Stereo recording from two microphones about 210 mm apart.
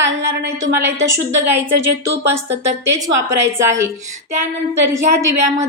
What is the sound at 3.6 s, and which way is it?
Speech, 15° right (ahead or behind).